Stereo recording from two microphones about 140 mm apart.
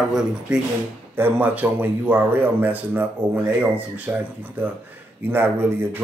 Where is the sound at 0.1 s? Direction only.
5° right (ahead or behind).